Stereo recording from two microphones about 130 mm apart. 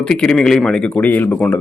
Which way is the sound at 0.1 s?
5° left (ahead or behind).